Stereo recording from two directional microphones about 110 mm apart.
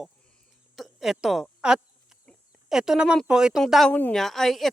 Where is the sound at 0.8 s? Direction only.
5° right (ahead or behind).